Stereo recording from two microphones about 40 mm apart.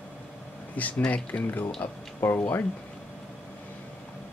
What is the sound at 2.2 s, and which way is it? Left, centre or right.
Speech, left.